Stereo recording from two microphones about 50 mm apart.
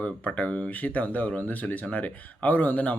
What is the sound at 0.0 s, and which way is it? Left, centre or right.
Speech, left.